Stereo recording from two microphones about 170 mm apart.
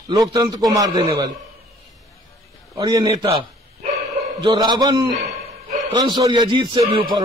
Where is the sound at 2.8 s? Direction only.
25° right (ahead or behind).